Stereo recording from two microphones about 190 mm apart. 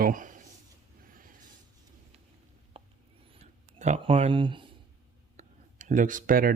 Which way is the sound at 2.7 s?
30° right (ahead or behind).